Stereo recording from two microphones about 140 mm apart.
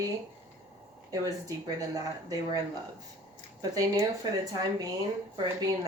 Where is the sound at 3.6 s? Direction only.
30° right (ahead or behind).